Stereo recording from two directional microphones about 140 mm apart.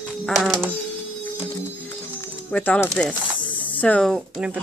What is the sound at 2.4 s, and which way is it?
Speech, 10° left (ahead or behind).